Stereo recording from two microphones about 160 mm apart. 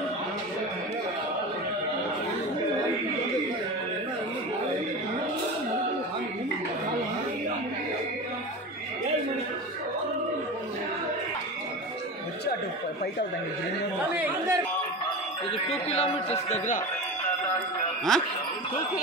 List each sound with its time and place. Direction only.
14.1 s speech: 10° right (ahead or behind)
15.5 s a man's voice: 40° left (ahead or behind)
18.1 s speech: 5° left (ahead or behind)